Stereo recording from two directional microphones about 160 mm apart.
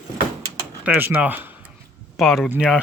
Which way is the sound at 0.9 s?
10° right (ahead or behind).